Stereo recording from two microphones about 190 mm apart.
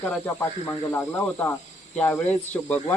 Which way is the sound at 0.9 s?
10° left (ahead or behind).